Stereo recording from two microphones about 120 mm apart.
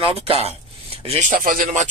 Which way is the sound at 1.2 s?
90° right.